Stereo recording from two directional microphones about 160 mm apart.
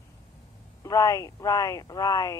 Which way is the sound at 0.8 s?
20° left (ahead or behind).